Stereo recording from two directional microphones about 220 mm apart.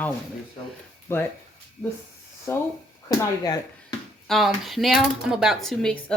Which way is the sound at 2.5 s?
10° left (ahead or behind).